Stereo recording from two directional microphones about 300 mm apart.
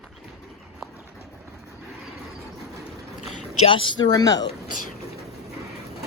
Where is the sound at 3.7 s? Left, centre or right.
Centre.